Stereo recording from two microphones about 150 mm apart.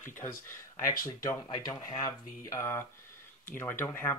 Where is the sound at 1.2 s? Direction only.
25° left (ahead or behind).